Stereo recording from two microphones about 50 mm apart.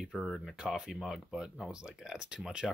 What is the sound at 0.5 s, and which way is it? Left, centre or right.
Speech, centre.